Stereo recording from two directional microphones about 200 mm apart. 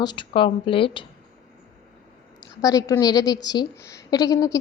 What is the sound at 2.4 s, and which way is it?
A woman's voice, 15° left (ahead or behind).